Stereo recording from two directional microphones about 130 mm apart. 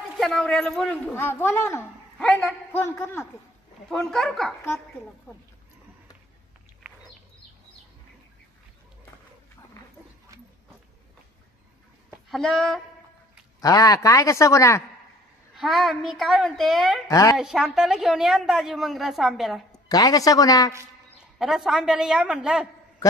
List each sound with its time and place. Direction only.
0.2 s a man's voice: 5° left (ahead or behind)
2.1 s a man's voice: 5° left (ahead or behind)
3.9 s a woman's voice: 5° left (ahead or behind)
12.3 s a woman's voice: centre (ahead or behind)
13.6 s speech: 25° left (ahead or behind)
15.5 s a woman's voice: centre (ahead or behind)
17.1 s speech: 25° left (ahead or behind)
17.4 s a woman's voice: 5° right (ahead or behind)
19.9 s speech: 30° left (ahead or behind)
21.4 s a woman's voice: 5° right (ahead or behind)